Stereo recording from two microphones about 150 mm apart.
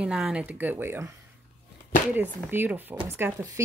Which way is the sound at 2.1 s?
15° right (ahead or behind).